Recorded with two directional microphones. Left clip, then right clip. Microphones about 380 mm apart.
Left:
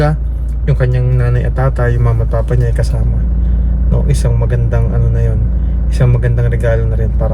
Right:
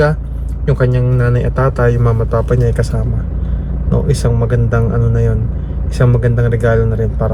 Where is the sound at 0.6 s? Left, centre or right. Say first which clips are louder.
Right 3 dB; centre.